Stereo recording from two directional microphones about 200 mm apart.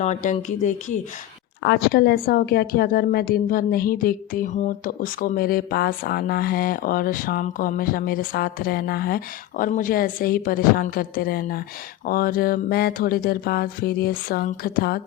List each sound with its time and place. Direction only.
0.0 s speech: 35° left (ahead or behind)
1.6 s a woman's voice: 55° left (ahead or behind)